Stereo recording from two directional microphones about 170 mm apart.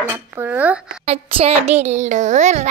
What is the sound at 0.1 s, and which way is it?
Speech, 10° right (ahead or behind).